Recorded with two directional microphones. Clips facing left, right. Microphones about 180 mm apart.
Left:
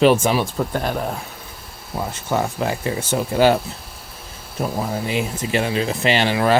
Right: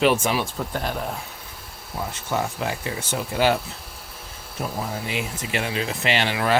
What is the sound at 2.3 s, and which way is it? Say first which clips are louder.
Speech: left 5 dB; 45° left (ahead or behind).